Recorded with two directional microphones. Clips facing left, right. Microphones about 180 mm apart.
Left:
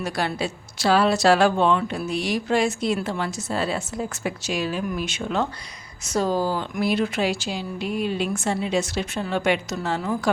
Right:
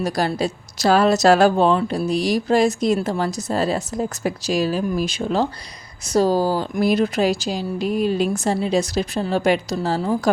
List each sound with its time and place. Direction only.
0.0 s a woman's voice: 40° right (ahead or behind)